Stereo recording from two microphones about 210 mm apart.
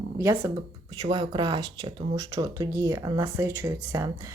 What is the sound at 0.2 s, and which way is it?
Speech, 10° right (ahead or behind).